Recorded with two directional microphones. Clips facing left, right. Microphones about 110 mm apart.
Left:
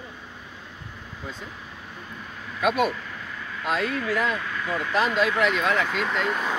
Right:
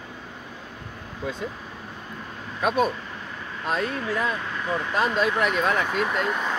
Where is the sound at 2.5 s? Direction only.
35° right (ahead or behind).